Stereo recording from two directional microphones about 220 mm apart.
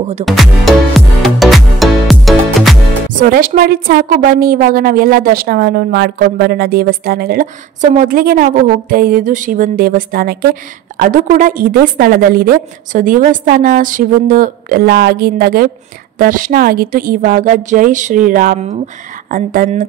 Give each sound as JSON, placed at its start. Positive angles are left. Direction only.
{"t": 0.2, "sound": "music", "side_deg": 0}
{"t": 3.1, "sound": "a woman's voice", "side_deg": -40}